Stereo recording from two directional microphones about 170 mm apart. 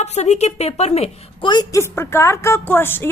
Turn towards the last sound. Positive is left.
turn(degrees=15)  # may be behind; listen again after turning